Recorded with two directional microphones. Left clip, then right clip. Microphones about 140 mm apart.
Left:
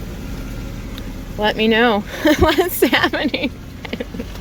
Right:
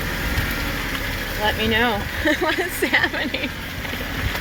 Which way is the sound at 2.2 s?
60° left (ahead or behind).